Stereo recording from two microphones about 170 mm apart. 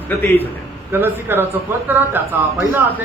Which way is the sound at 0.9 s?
10° right (ahead or behind).